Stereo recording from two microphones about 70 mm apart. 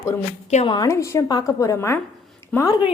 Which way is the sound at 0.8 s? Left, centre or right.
Left.